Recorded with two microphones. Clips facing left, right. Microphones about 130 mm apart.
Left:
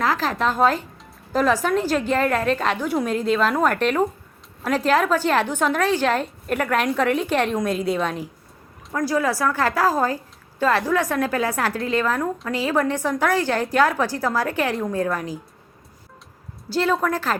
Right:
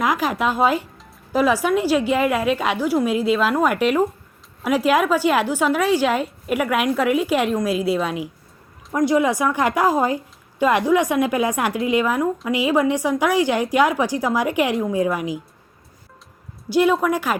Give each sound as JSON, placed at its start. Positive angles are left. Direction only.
{"t": 0.0, "sound": "a woman's voice", "side_deg": -15}
{"t": 8.9, "sound": "a woman's voice", "side_deg": -20}
{"t": 16.6, "sound": "a woman's voice", "side_deg": -15}